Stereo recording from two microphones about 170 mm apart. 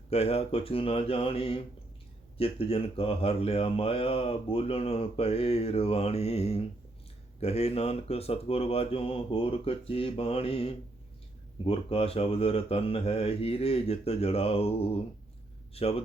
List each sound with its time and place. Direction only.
0.1 s speech: 35° left (ahead or behind)